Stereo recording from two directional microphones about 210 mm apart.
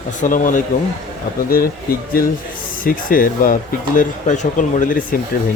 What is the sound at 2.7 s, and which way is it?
Speech, 40° left (ahead or behind).